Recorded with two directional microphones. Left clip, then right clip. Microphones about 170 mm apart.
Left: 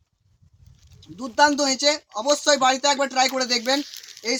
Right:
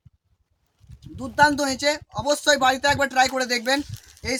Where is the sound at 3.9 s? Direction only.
40° right (ahead or behind).